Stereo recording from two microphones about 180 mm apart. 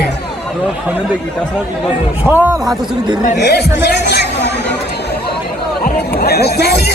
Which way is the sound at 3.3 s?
65° left (ahead or behind).